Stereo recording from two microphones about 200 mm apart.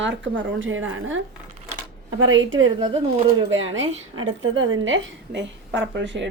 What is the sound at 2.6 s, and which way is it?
Speech, 25° right (ahead or behind).